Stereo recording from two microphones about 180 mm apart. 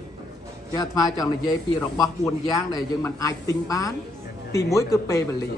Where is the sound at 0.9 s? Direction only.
20° left (ahead or behind).